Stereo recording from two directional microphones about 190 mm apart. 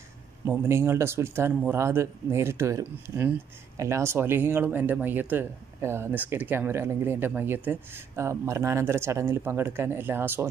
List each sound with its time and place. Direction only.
0.5 s speech: 15° right (ahead or behind)